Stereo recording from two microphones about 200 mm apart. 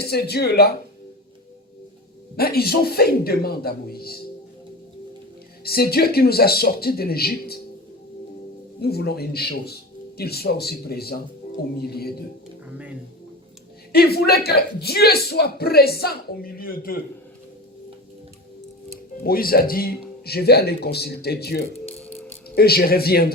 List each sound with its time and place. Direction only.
0.0 s speech: 50° left (ahead or behind)
2.3 s speech: 50° left (ahead or behind)
5.6 s speech: 50° left (ahead or behind)
8.8 s speech: 55° left (ahead or behind)
13.9 s speech: 50° left (ahead or behind)
19.2 s speech: 50° left (ahead or behind)
21.8 s music: 5° left (ahead or behind)
22.4 s speech: 50° left (ahead or behind)